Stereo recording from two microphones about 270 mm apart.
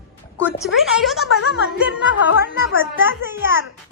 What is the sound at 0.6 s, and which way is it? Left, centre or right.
Speech, centre.